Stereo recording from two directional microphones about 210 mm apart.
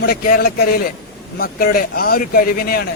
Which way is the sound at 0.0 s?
45° left (ahead or behind).